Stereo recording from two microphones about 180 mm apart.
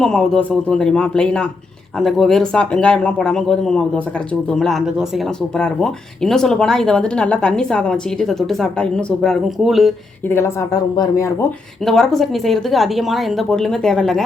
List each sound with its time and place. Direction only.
0.0 s speech: 5° left (ahead or behind)
10.2 s speech: 15° left (ahead or behind)
11.9 s speech: centre (ahead or behind)